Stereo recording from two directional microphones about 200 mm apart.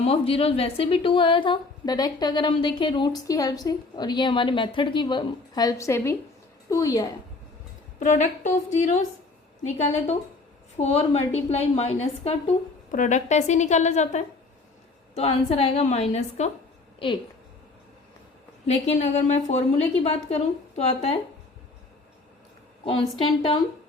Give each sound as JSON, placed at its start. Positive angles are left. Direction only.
{"t": 0.0, "sound": "a woman's voice", "side_deg": 30}
{"t": 7.9, "sound": "a woman's voice", "side_deg": 40}
{"t": 18.9, "sound": "a woman's voice", "side_deg": 35}
{"t": 22.8, "sound": "a woman's voice", "side_deg": 25}